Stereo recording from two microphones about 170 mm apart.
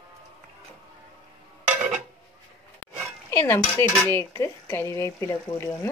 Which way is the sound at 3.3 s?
15° left (ahead or behind).